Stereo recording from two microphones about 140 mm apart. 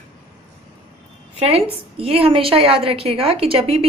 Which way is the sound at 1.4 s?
45° right (ahead or behind).